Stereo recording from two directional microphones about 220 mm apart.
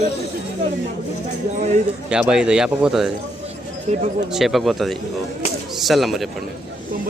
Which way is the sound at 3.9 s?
30° right (ahead or behind).